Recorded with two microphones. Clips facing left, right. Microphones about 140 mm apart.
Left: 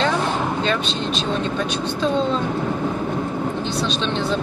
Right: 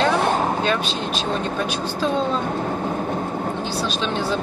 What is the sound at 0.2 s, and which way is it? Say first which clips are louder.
Vehicle: right 2 dB; 50° right (ahead or behind).